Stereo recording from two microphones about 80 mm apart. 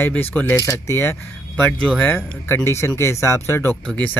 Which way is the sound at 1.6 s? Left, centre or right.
Centre.